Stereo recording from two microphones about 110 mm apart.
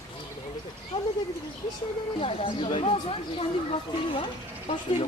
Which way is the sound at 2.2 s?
55° left (ahead or behind).